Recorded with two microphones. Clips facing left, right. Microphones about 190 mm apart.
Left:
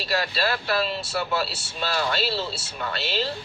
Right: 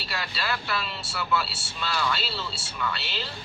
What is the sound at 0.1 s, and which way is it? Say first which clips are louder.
Speech: left 6 dB; 35° left (ahead or behind).